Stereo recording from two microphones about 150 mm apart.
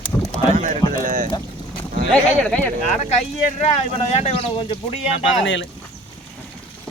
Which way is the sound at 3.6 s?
45° left (ahead or behind).